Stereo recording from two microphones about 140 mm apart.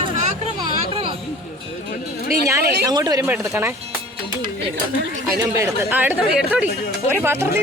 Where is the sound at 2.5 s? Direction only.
25° right (ahead or behind).